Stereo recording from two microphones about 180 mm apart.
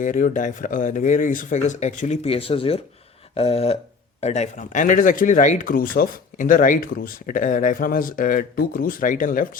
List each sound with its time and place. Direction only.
0.0 s speech: 45° left (ahead or behind)
3.3 s a sound: 35° left (ahead or behind)
4.2 s speech: 40° left (ahead or behind)